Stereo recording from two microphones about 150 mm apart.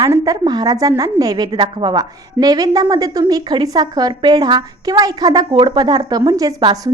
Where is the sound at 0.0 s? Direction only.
25° right (ahead or behind).